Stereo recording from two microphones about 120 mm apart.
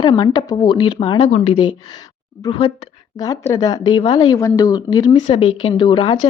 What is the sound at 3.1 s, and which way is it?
A woman's voice, 30° left (ahead or behind).